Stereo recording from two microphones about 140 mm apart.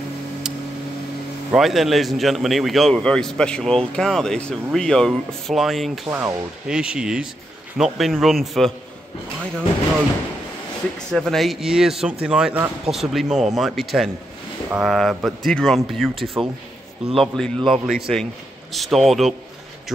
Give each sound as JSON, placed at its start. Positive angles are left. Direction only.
{"t": 1.5, "sound": "a man's voice", "side_deg": 0}
{"t": 6.0, "sound": "speech", "side_deg": -15}
{"t": 6.7, "sound": "a man's voice", "side_deg": -5}
{"t": 11.1, "sound": "a man's voice", "side_deg": 0}